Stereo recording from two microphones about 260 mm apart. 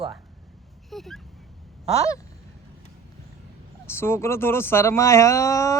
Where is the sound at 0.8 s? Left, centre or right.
Centre.